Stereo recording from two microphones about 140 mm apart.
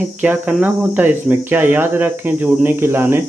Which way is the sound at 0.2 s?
10° right (ahead or behind).